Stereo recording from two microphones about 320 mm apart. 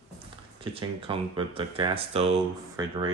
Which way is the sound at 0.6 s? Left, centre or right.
Centre.